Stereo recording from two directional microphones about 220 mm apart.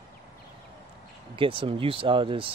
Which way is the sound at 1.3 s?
25° right (ahead or behind).